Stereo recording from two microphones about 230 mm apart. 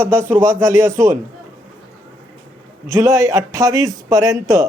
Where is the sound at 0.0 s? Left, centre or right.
Centre.